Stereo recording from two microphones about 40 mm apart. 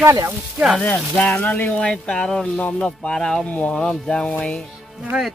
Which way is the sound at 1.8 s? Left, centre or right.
Left.